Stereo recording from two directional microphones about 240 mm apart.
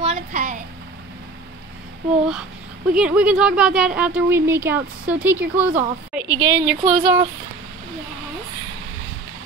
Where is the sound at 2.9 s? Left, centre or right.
Centre.